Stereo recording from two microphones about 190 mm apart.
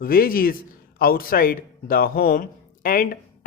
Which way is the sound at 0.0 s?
50° left (ahead or behind).